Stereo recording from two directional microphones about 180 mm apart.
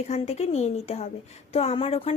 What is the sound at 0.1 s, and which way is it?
A woman's voice, 35° left (ahead or behind).